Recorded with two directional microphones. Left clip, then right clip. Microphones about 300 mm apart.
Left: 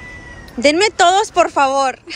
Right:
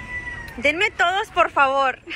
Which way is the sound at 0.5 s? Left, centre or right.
Centre.